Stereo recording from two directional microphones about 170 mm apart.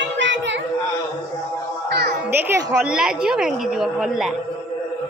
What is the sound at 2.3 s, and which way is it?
Children playing, 10° right (ahead or behind).